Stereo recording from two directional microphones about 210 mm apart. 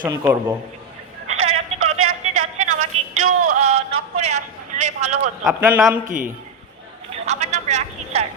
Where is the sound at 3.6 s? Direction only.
30° right (ahead or behind).